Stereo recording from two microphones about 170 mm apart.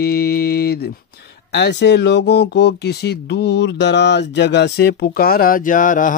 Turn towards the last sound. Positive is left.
turn(degrees=50)  # may be behind; listen again after turning